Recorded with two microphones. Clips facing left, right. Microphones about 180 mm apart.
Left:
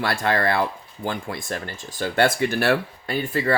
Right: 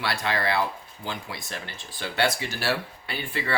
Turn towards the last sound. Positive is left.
turn(degrees=40)  # may be behind; listen again after turning